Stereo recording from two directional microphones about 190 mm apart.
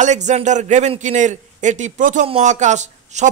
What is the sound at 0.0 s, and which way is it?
Speech, 40° right (ahead or behind).